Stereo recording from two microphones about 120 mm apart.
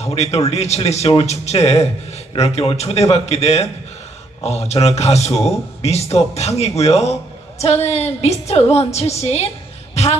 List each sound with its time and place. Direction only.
0.0 s speech: 65° left (ahead or behind)